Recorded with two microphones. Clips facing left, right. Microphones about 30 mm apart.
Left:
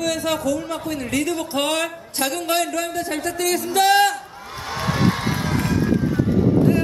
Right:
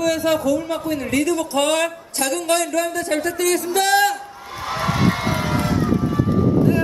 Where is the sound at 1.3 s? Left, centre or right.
Centre.